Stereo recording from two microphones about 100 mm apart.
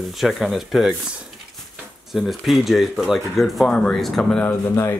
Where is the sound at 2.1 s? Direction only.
Centre (ahead or behind).